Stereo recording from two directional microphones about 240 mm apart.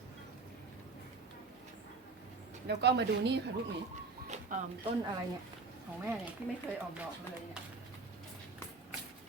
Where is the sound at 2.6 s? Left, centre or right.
Right.